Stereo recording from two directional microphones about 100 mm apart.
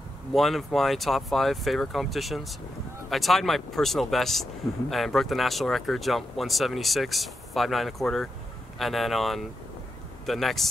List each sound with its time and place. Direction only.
0.3 s speech: centre (ahead or behind)